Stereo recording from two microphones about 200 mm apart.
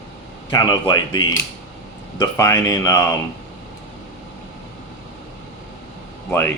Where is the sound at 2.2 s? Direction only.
15° left (ahead or behind).